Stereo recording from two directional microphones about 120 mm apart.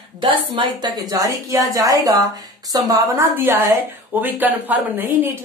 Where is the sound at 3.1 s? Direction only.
20° right (ahead or behind).